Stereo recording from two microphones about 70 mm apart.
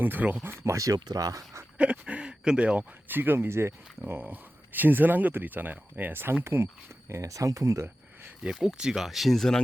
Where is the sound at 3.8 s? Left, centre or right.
Centre.